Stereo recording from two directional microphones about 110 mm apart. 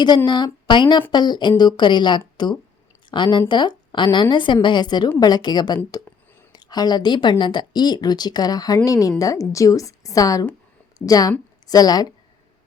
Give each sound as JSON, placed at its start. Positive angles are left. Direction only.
{"t": 0.3, "sound": "a woman's voice", "side_deg": 40}